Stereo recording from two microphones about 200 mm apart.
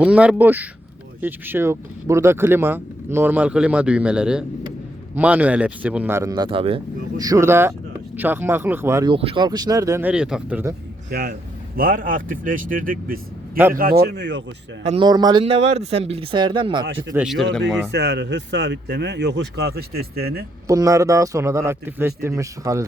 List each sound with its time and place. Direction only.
0.0 s speech: 5° right (ahead or behind)
9.1 s speech: 25° right (ahead or behind); by 10.8 s 10° right (ahead or behind)
11.1 s speech: 50° right (ahead or behind)
14.8 s speech: 25° right (ahead or behind)
17.2 s speech: centre (ahead or behind)
17.9 s speech: 60° right (ahead or behind)
20.7 s speech: 15° right (ahead or behind)